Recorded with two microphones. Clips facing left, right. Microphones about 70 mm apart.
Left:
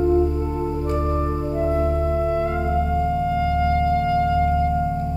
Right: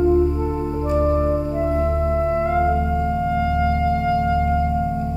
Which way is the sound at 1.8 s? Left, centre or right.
Right.